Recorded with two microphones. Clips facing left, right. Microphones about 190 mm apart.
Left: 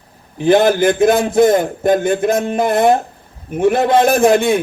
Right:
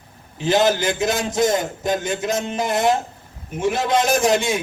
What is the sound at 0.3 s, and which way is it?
A man's voice, 55° left (ahead or behind).